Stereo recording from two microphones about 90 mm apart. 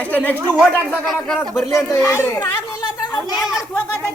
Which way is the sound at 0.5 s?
15° right (ahead or behind).